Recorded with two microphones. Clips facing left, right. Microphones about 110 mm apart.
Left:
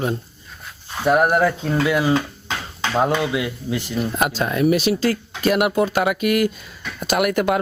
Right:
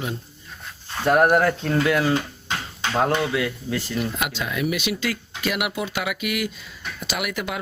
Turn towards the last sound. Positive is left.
turn(degrees=50)  # may be behind; listen again after turning